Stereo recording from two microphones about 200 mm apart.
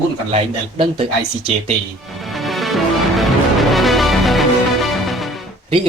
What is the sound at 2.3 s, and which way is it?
Music, centre (ahead or behind).